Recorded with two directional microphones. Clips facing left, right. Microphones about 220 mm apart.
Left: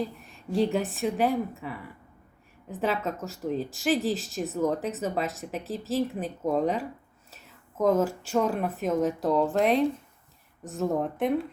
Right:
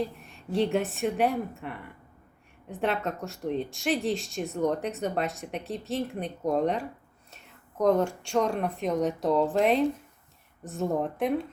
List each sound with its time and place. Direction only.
0.0 s a woman's voice: centre (ahead or behind)